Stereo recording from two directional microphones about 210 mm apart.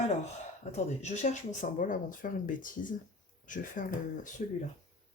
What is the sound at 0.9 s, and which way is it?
Speech, 30° left (ahead or behind).